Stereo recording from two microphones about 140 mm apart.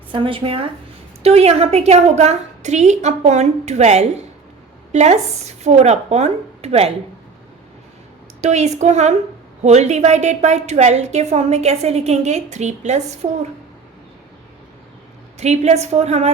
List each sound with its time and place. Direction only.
0.1 s a woman's voice: 35° right (ahead or behind)
8.4 s a woman's voice: 55° right (ahead or behind)
15.4 s a woman's voice: 50° right (ahead or behind)